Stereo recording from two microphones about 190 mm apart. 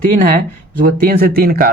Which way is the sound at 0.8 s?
50° right (ahead or behind).